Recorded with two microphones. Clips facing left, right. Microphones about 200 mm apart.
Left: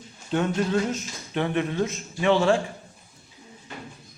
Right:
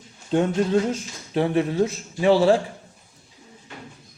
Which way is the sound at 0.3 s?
30° right (ahead or behind).